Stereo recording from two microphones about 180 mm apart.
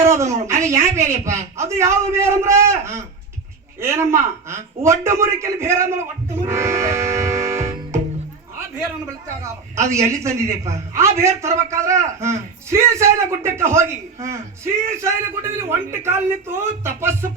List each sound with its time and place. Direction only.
0.0 s a man's voice: 15° right (ahead or behind)
6.5 s music: 15° right (ahead or behind)
9.7 s a man's voice: 15° right (ahead or behind)